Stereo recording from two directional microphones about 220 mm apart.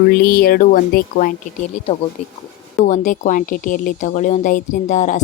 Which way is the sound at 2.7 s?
35° left (ahead or behind).